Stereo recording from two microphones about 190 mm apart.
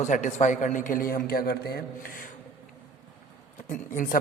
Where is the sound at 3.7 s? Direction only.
45° left (ahead or behind).